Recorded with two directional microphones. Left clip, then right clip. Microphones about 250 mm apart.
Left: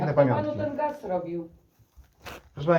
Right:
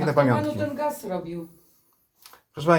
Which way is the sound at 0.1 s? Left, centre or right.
Right.